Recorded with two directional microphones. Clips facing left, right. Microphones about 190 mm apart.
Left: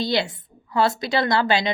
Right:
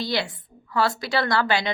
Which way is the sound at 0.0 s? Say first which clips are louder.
Left 4 dB; 25° left (ahead or behind).